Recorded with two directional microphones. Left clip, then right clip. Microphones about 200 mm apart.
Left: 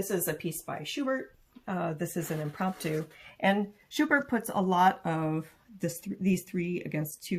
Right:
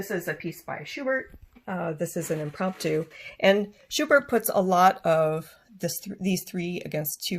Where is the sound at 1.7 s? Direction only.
50° right (ahead or behind).